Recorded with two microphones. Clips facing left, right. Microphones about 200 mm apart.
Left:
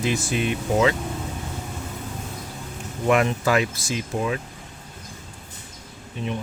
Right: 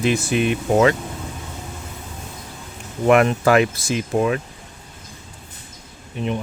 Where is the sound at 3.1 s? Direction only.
60° right (ahead or behind).